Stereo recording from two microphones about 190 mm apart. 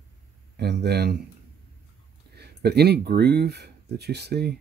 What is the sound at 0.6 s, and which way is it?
Speech, 60° right (ahead or behind).